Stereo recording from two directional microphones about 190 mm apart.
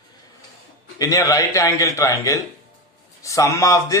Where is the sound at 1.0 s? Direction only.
15° left (ahead or behind).